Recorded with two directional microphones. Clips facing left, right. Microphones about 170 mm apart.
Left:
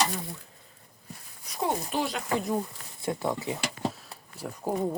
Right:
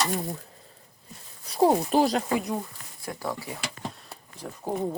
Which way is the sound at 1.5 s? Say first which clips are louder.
Right 8 dB; 35° right (ahead or behind).